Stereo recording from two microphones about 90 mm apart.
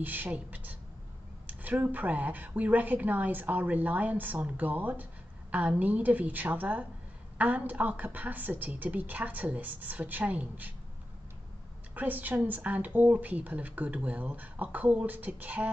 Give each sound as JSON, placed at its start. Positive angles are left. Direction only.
{"t": 0.0, "sound": "speech", "side_deg": -20}
{"t": 11.9, "sound": "speech", "side_deg": -20}